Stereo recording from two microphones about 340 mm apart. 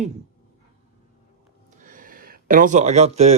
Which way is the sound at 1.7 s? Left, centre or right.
Right.